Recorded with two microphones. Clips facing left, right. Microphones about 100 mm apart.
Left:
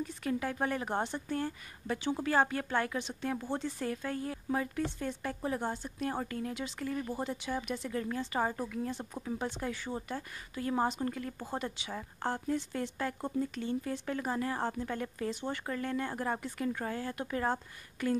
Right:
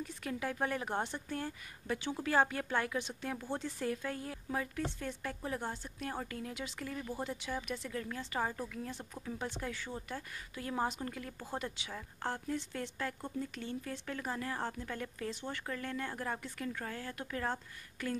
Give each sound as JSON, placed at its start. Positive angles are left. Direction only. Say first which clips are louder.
{"t": 0.2, "sound": "speech", "louder": "left 3 dB", "side_deg": 0}